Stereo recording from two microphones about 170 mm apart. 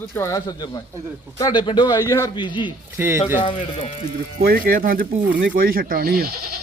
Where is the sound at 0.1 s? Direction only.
15° left (ahead or behind).